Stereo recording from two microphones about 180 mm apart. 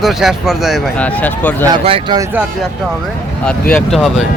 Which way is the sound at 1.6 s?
30° right (ahead or behind).